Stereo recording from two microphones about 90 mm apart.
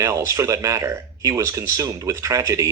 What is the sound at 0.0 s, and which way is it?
Speech, 40° right (ahead or behind).